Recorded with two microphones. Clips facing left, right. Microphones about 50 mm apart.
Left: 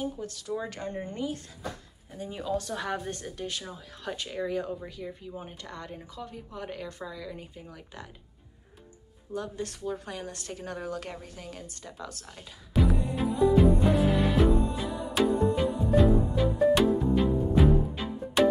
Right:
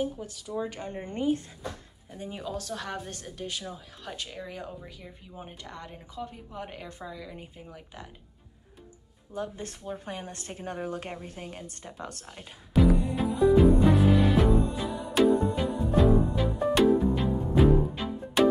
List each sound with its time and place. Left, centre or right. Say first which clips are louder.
0.0 s speech: right 2 dB; centre
1.0 s speech: right 10 dB; right
2.3 s speech: left 4 dB; centre
9.3 s a woman's voice: left 1 dB; centre; by 12.3 s right
12.7 s music: right 3 dB; centre